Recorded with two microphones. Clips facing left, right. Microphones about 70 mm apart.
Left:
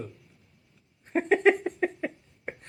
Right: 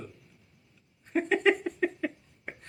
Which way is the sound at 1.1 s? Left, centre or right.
Left.